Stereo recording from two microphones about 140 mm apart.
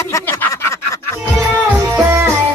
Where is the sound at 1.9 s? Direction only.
20° right (ahead or behind).